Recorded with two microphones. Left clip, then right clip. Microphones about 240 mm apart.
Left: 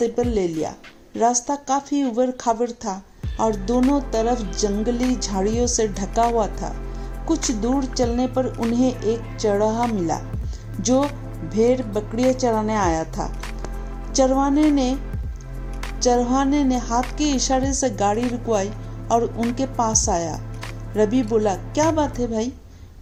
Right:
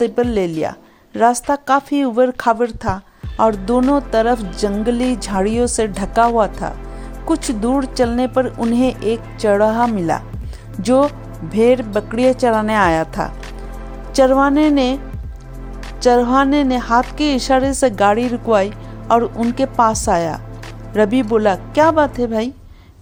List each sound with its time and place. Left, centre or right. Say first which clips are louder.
0.0 s a woman's voice: right 5 dB; right
3.9 s a woman's voice: right 6 dB; right
11.5 s a woman's voice: right 6 dB; right
16.0 s a woman's voice: right 6 dB; right